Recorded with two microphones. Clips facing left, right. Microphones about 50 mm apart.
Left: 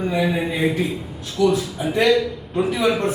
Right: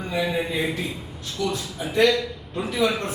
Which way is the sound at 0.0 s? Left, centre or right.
Centre.